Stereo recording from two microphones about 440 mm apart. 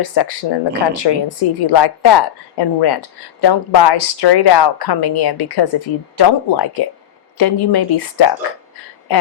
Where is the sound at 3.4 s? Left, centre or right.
Left.